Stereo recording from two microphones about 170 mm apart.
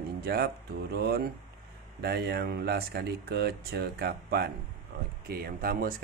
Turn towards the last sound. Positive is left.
turn(degrees=-65)  # may be behind; listen again after turning